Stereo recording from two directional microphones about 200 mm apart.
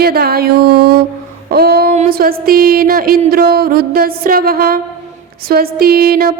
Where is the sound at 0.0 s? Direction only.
50° right (ahead or behind).